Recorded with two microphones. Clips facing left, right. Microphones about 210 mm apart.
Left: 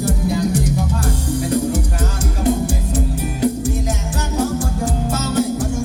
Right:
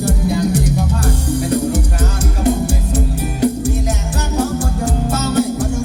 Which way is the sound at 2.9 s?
70° right (ahead or behind).